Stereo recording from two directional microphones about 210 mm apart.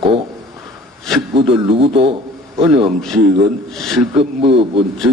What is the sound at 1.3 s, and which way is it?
A man's voice, 25° right (ahead or behind).